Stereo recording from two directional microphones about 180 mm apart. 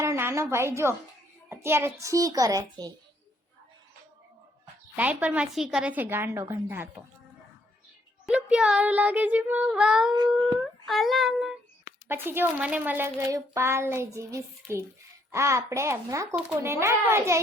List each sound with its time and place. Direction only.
0.0 s a woman's voice: 15° right (ahead or behind)
4.9 s a woman's voice: 10° right (ahead or behind)
8.3 s a woman's voice: 5° right (ahead or behind)